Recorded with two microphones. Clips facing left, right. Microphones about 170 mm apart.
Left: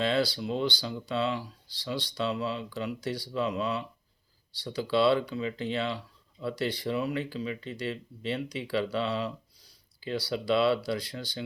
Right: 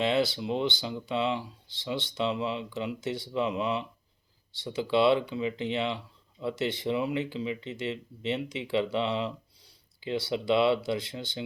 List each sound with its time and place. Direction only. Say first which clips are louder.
0.0 s speech: right 1 dB; 20° right (ahead or behind)